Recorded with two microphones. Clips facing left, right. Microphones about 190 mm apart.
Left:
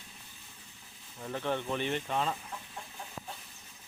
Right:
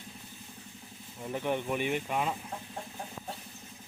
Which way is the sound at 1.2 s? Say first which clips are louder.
Right 2 dB; 15° right (ahead or behind).